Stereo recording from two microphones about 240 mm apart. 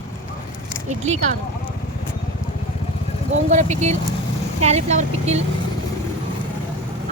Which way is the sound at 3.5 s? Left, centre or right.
Right.